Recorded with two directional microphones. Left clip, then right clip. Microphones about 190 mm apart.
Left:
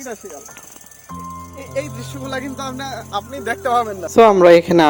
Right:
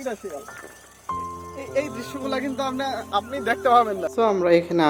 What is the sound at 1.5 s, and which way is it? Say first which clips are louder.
Speech: even; 10° right (ahead or behind).